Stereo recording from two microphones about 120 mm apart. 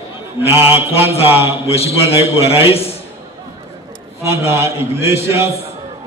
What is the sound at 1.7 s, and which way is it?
A man's voice, 55° left (ahead or behind).